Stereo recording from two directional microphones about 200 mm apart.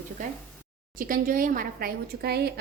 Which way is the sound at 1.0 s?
45° right (ahead or behind).